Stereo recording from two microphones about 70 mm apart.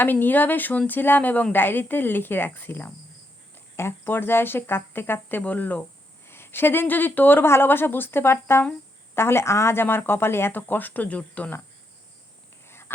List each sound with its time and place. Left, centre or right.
0.0 s speech: left
6.2 s speech: left
12.6 s a sound: left